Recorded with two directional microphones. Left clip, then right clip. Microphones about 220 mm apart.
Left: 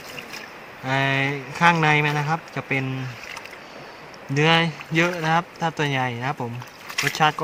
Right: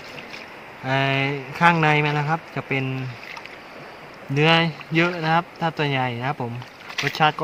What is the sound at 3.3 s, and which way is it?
Rowboat, 45° left (ahead or behind).